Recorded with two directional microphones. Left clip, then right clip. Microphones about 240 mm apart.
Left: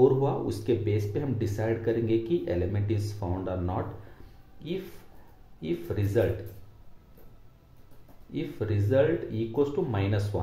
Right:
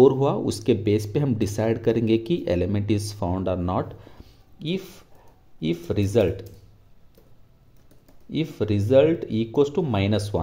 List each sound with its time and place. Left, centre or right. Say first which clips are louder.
0.0 s speech: right 5 dB; right
8.3 s speech: right 7 dB; right